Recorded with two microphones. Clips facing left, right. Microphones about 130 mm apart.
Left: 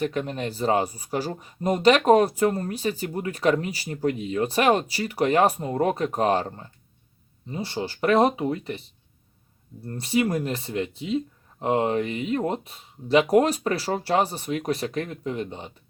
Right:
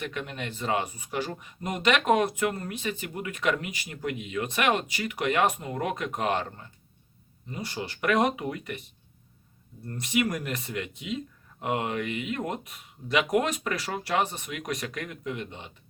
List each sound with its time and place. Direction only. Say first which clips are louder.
0.0 s speech: left 8 dB; 35° left (ahead or behind)
9.8 s speech: left 4 dB; 30° left (ahead or behind)